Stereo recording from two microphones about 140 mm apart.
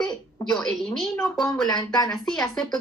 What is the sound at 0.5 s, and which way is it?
Speech, centre (ahead or behind).